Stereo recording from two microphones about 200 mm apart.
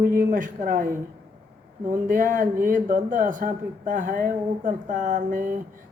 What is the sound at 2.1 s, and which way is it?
Speech, 40° right (ahead or behind).